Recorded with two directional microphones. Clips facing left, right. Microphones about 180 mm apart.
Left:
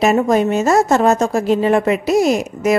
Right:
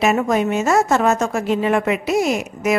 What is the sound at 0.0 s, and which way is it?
Speech, 35° left (ahead or behind).